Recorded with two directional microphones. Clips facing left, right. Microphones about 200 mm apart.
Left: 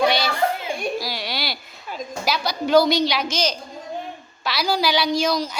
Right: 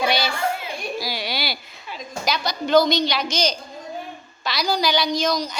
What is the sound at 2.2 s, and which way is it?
A woman's voice, 5° left (ahead or behind).